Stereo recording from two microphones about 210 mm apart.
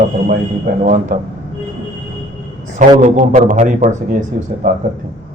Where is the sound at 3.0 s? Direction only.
35° right (ahead or behind).